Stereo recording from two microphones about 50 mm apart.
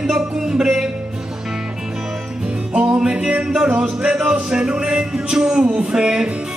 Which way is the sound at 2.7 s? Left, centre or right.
Right.